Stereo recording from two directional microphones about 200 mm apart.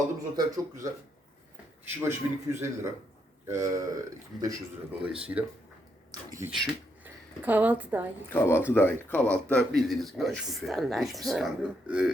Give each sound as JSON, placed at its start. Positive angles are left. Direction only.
{"t": 0.3, "sound": "a man's voice", "side_deg": -15}
{"t": 8.3, "sound": "speech", "side_deg": 10}